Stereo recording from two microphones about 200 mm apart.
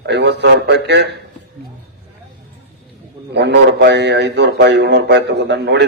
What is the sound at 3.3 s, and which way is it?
A man's voice, 60° right (ahead or behind).